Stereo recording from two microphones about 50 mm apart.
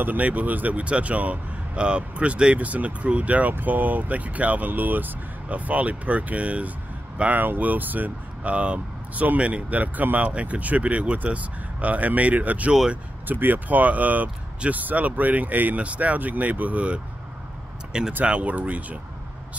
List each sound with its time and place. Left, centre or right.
0.0 s speech: right
7.2 s speech: right
18.2 s speech: right